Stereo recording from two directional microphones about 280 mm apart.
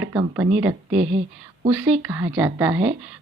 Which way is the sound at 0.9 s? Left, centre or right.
Right.